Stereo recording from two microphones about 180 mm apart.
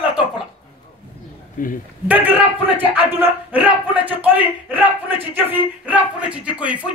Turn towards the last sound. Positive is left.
turn(degrees=-5)  # may be behind; listen again after turning